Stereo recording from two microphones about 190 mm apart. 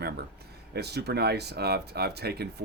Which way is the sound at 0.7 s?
60° right (ahead or behind).